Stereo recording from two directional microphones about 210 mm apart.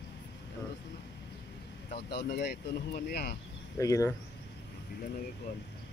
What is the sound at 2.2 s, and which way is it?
Speech, 50° left (ahead or behind).